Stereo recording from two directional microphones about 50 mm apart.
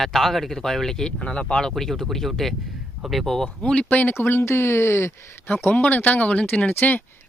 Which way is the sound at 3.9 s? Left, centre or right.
Left.